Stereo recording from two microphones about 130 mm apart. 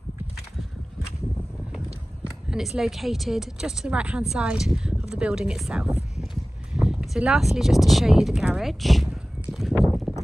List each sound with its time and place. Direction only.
1.7 s a sound: 5° right (ahead or behind)
2.5 s speech: 5° right (ahead or behind)
9.8 s horse: centre (ahead or behind)